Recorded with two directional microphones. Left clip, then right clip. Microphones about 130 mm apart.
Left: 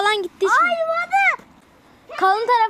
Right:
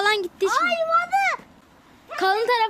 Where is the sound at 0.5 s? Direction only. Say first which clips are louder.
Left 6 dB; 30° left (ahead or behind).